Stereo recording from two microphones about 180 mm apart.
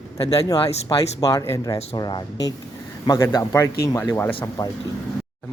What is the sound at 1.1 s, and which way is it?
A man's voice, 20° left (ahead or behind).